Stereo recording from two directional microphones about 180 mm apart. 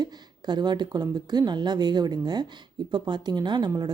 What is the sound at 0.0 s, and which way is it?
Speech, 25° right (ahead or behind).